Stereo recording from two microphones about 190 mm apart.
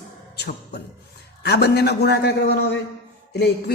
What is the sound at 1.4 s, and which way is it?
A woman's voice, 60° left (ahead or behind).